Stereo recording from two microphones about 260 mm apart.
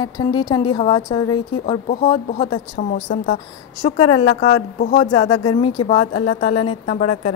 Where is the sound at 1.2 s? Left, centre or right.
Left.